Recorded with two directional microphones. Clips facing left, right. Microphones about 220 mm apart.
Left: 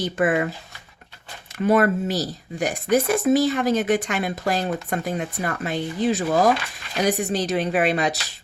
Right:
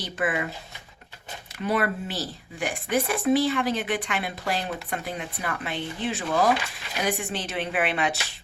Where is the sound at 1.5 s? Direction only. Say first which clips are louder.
Left 7 dB; 45° left (ahead or behind).